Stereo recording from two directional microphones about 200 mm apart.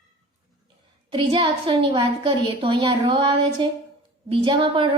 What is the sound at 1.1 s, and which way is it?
A woman's voice, 25° right (ahead or behind).